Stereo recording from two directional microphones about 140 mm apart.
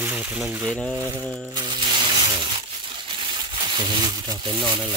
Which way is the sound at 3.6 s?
35° right (ahead or behind).